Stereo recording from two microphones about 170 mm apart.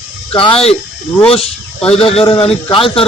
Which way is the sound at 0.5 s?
35° left (ahead or behind).